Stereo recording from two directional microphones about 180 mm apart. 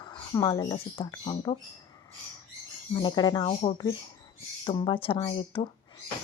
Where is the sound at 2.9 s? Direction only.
25° left (ahead or behind).